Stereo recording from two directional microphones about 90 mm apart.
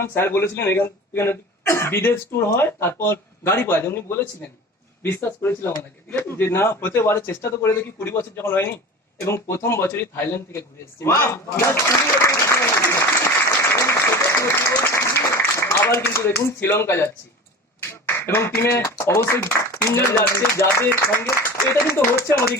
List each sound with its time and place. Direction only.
0.0 s a man's voice: 25° left (ahead or behind)
12.3 s applause: 35° left (ahead or behind)
17.7 s a man's voice: 25° left (ahead or behind)